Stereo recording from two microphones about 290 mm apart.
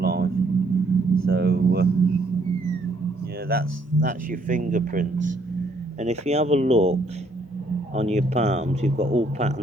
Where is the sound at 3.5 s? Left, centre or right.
Right.